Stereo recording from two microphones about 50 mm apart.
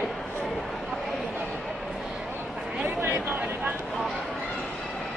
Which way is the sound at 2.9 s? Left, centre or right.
Right.